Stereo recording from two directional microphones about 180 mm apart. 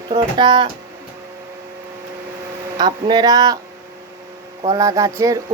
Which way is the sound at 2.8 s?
25° right (ahead or behind).